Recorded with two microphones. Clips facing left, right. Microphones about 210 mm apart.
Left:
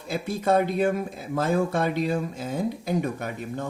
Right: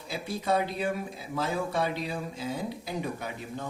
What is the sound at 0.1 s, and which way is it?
Speech, 50° left (ahead or behind).